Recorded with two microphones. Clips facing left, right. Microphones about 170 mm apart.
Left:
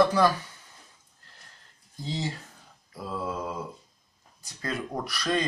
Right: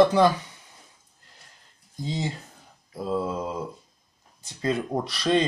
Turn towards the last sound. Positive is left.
turn(degrees=-25)  # may be behind; listen again after turning